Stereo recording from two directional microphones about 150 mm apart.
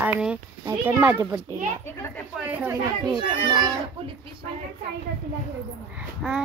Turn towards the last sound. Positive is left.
turn(degrees=-5)  # may be behind; listen again after turning